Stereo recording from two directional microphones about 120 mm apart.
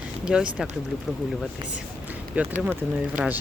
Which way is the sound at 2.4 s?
10° right (ahead or behind).